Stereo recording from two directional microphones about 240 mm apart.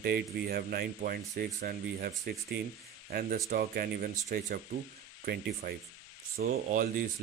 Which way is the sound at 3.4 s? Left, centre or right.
Right.